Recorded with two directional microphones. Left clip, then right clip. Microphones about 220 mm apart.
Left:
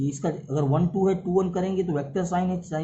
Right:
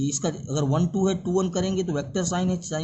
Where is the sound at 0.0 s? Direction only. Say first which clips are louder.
Right 1 dB; 65° right (ahead or behind).